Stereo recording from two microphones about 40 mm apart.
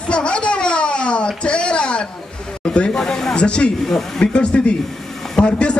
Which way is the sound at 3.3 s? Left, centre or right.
Left.